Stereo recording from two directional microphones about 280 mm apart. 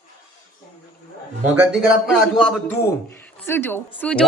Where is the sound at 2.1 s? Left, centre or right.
Centre.